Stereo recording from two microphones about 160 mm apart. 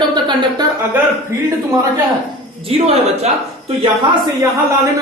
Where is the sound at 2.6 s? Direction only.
40° right (ahead or behind).